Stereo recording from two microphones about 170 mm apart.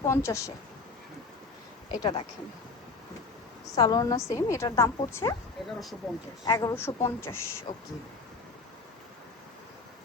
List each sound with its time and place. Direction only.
0.1 s speech: 15° left (ahead or behind)
1.9 s a woman's voice: 25° left (ahead or behind)
3.8 s a woman's voice: 25° left (ahead or behind)
5.6 s speech: centre (ahead or behind)
6.4 s speech: 20° left (ahead or behind)